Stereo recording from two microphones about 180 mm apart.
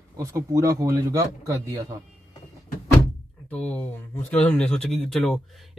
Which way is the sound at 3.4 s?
10° left (ahead or behind).